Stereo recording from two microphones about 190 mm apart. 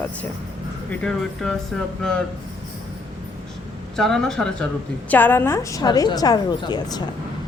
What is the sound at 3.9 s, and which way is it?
A woman's voice, centre (ahead or behind).